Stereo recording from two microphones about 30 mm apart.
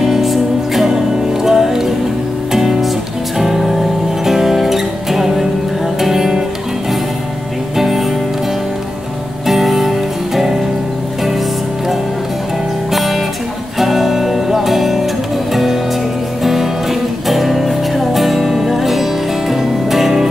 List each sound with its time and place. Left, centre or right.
0.1 s music: centre
7.7 s music: centre
9.5 s music: centre
12.9 s music: centre
17.3 s music: centre